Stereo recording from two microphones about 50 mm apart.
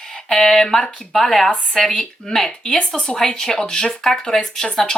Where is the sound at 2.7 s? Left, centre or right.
Left.